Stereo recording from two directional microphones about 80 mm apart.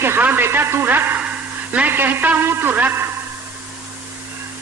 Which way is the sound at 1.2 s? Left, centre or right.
Centre.